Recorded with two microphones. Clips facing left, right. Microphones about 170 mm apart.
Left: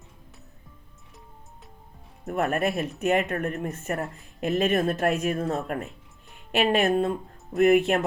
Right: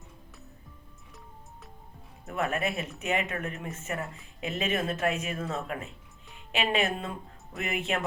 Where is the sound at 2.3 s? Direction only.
45° left (ahead or behind).